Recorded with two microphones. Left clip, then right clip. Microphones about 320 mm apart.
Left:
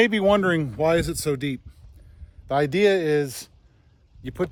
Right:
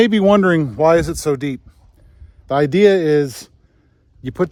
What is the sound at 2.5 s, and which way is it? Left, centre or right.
Speech, right.